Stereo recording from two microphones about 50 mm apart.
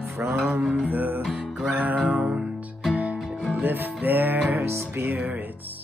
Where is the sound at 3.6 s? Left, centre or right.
Right.